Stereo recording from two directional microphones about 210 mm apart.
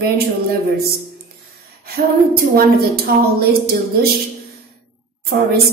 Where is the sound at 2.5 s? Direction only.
45° right (ahead or behind).